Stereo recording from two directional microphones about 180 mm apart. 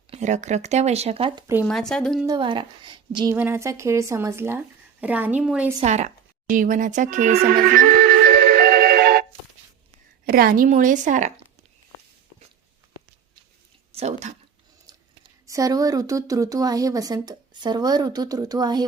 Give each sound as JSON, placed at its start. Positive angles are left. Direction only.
{"t": 0.1, "sound": "speech", "side_deg": -40}
{"t": 1.6, "sound": "speech", "side_deg": 5}
{"t": 2.2, "sound": "speech", "side_deg": -25}
{"t": 3.3, "sound": "speech", "side_deg": -10}
{"t": 5.8, "sound": "a sound", "side_deg": -40}
{"t": 10.2, "sound": "a woman's voice", "side_deg": -55}
{"t": 13.9, "sound": "speech", "side_deg": -40}
{"t": 14.9, "sound": "a sound", "side_deg": -25}
{"t": 15.4, "sound": "speech", "side_deg": -20}